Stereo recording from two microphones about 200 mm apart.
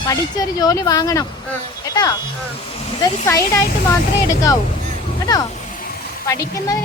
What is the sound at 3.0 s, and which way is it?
A woman's voice, 15° left (ahead or behind).